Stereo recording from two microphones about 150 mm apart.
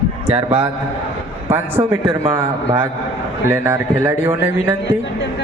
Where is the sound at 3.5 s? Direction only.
15° right (ahead or behind).